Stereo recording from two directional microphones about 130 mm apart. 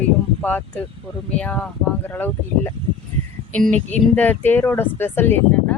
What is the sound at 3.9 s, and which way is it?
Speech, 15° left (ahead or behind).